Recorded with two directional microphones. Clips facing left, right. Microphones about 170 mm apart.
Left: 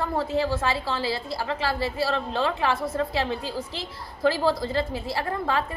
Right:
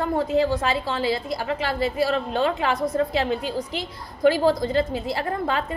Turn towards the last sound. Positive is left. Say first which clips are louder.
# right 1 dB
turn(degrees=-20)  # may be behind; listen again after turning